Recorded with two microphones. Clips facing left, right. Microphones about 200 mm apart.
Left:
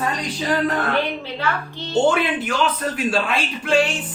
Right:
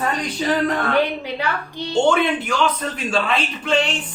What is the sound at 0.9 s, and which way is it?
Speech, 15° right (ahead or behind).